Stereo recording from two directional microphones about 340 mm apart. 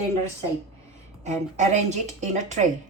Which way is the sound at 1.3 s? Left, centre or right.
Right.